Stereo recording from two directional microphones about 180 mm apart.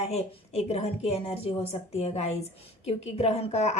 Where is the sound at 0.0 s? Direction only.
35° left (ahead or behind).